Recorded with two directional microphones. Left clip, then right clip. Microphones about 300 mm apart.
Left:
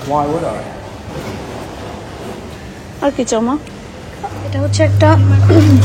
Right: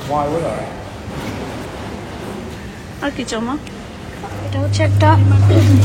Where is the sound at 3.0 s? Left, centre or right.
Centre.